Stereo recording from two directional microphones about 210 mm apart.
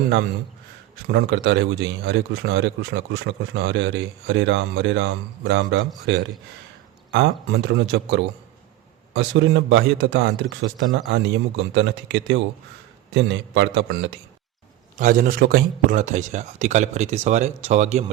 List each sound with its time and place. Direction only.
1.0 s a man's voice: 60° right (ahead or behind)
14.9 s a man's voice: 40° right (ahead or behind)